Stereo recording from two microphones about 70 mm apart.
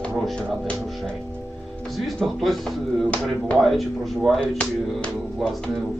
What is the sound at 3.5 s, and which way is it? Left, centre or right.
Speech, centre.